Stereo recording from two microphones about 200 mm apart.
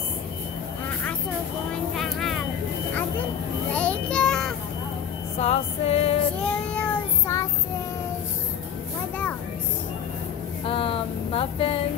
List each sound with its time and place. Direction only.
2.0 s vehicle: centre (ahead or behind)
3.7 s child singing: 5° left (ahead or behind)
5.4 s music: 30° left (ahead or behind)
6.4 s child singing: 5° left (ahead or behind)
10.6 s a sound: 25° left (ahead or behind)